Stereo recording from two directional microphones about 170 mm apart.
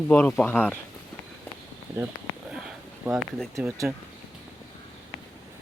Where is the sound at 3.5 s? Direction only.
20° right (ahead or behind).